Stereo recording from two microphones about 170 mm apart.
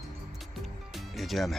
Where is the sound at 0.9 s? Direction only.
Centre (ahead or behind).